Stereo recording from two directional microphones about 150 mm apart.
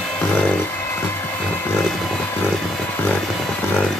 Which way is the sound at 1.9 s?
5° left (ahead or behind).